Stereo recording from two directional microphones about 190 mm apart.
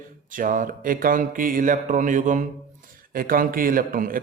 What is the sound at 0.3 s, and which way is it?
A man's voice, 45° right (ahead or behind).